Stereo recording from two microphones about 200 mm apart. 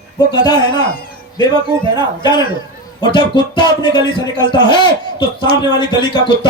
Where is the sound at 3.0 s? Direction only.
20° left (ahead or behind).